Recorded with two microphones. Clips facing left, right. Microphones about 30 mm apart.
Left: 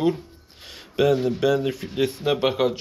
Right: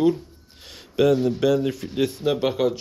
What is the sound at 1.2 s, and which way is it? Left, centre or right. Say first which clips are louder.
Speech: right 1 dB; centre.